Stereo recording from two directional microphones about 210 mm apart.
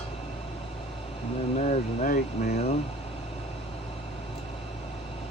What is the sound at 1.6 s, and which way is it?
Speech, 35° left (ahead or behind).